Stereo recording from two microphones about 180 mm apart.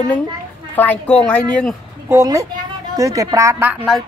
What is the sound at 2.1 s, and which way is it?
A woman's voice, 20° right (ahead or behind).